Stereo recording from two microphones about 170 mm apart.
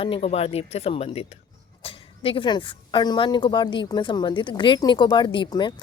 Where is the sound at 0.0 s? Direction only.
35° left (ahead or behind).